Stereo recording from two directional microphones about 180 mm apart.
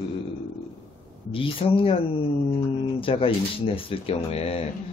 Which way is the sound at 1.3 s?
30° left (ahead or behind).